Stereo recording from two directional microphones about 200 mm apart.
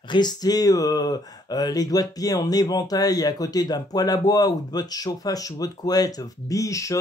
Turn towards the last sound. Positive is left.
turn(degrees=15)  # may be behind; listen again after turning